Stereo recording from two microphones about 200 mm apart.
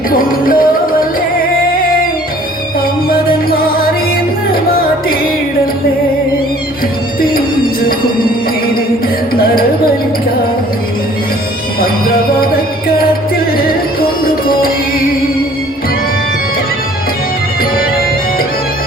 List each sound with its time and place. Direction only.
0.2 s music: 45° left (ahead or behind)
11.8 s music: 45° left (ahead or behind)